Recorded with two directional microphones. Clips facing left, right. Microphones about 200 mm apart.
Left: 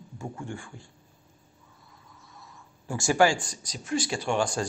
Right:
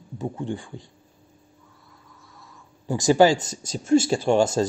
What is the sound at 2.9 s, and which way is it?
Speech, 20° right (ahead or behind).